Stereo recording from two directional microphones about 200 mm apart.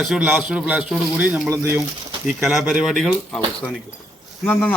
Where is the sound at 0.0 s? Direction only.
Centre (ahead or behind).